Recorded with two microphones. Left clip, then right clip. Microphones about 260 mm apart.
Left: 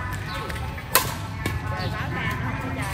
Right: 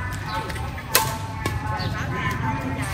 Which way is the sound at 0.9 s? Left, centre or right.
Centre.